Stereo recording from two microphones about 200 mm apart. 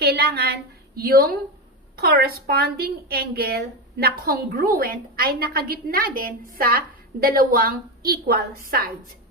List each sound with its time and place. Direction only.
0.0 s a woman's voice: 55° right (ahead or behind)